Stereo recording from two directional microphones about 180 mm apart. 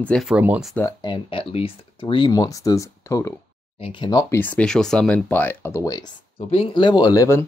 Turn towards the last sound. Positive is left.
turn(degrees=15)  # may be behind; listen again after turning